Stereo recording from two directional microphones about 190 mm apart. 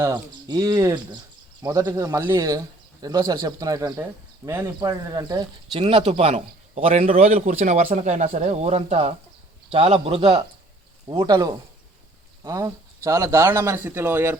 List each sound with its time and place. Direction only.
0.0 s speech: 20° right (ahead or behind)